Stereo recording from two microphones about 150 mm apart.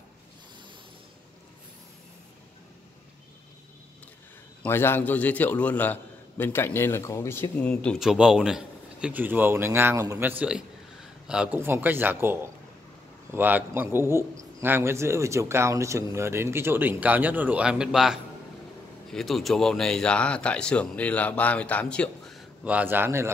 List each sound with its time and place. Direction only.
4.6 s speech: 15° left (ahead or behind)
7.7 s speech: 5° left (ahead or behind)
22.7 s speech: 10° right (ahead or behind)